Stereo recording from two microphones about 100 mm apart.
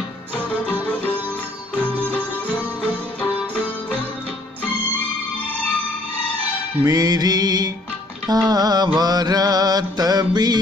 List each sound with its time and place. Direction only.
0.7 s music: 15° left (ahead or behind)
6.8 s music: 40° right (ahead or behind)